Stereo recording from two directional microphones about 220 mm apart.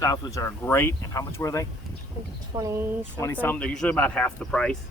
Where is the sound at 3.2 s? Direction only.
10° left (ahead or behind).